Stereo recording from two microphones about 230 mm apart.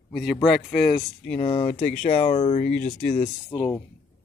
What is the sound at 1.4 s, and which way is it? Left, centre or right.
Speech, left.